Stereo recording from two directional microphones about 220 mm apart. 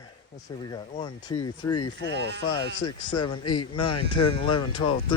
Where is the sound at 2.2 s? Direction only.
50° right (ahead or behind).